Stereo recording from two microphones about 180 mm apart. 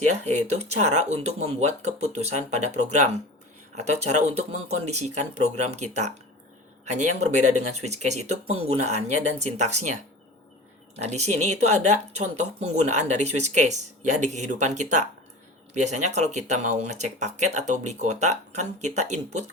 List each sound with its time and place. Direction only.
0.3 s speech: 35° right (ahead or behind)
11.0 s speech: 40° right (ahead or behind)